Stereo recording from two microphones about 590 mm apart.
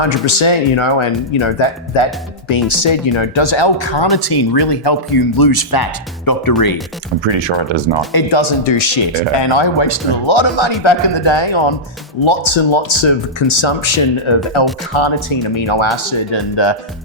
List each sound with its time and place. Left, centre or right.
0.3 s speech: left
7.3 s speech: right
8.1 s speech: left